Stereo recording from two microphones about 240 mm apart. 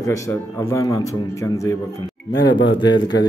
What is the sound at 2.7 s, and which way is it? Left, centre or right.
Speech, centre.